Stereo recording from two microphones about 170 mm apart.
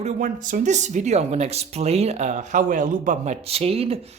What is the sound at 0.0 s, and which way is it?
Speech, 45° right (ahead or behind).